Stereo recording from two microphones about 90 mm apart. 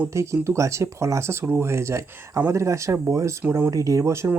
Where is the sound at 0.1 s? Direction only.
35° right (ahead or behind).